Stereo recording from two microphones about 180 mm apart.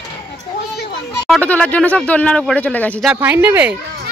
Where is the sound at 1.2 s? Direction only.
5° left (ahead or behind).